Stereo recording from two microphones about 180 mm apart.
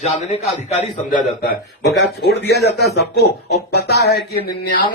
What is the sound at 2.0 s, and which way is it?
Speech, 70° left (ahead or behind).